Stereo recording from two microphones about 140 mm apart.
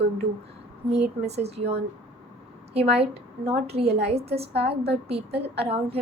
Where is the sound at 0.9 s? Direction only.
50° right (ahead or behind).